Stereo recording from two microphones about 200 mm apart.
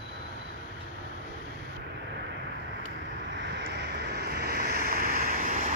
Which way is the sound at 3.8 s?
55° right (ahead or behind).